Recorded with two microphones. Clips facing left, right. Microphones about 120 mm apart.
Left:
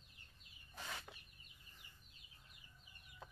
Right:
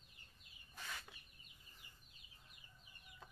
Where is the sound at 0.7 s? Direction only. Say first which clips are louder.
Left 2 dB; 25° left (ahead or behind).